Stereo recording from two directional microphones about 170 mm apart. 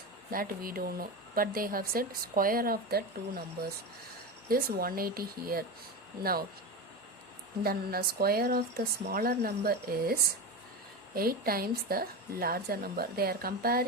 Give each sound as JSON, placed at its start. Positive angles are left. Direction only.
{"t": 0.3, "sound": "a woman's voice", "side_deg": -55}
{"t": 7.6, "sound": "a woman's voice", "side_deg": -65}